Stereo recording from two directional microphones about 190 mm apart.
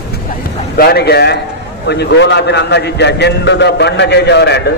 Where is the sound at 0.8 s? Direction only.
55° left (ahead or behind).